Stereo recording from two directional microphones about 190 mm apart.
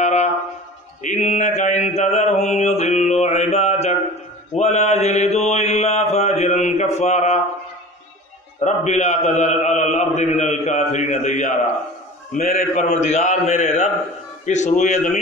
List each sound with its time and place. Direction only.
0.0 s a sound: 40° left (ahead or behind)
1.0 s mantra: 40° left (ahead or behind)
8.6 s a man's voice: 40° left (ahead or behind)